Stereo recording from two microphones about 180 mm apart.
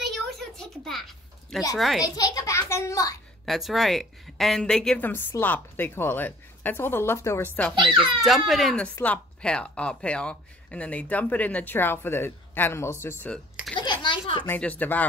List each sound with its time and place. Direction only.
0.0 s a sound: centre (ahead or behind)
1.8 s a child's voice: centre (ahead or behind)
2.0 s a child's voice: 20° left (ahead or behind)
3.4 s speech: centre (ahead or behind)
7.7 s a child's voice: 25° right (ahead or behind)
8.2 s speech: centre (ahead or behind)
13.7 s a sound: 25° left (ahead or behind)
14.4 s speech: 10° left (ahead or behind)